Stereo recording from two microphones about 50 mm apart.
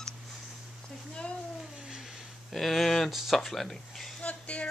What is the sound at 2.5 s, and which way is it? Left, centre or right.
Speech, centre.